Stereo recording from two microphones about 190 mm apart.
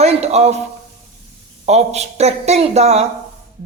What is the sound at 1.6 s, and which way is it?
Speech, 35° right (ahead or behind).